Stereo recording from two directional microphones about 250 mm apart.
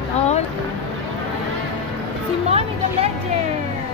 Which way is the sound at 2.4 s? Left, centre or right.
Right.